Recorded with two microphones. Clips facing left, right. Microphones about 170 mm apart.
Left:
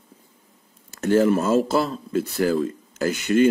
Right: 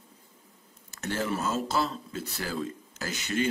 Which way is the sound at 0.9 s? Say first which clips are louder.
Left 13 dB; 50° left (ahead or behind).